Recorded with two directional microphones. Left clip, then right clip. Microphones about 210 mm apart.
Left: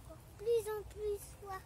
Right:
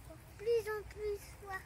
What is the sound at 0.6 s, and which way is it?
Speech, 10° left (ahead or behind).